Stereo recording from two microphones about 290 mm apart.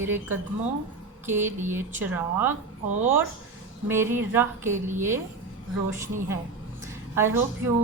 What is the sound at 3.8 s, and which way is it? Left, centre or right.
A woman's voice, centre.